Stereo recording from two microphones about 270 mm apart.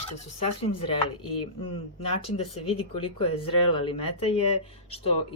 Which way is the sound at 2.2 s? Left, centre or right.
Left.